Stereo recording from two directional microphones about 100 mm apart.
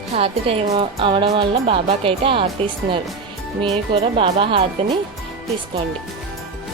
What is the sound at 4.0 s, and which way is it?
A woman's voice, 75° right (ahead or behind).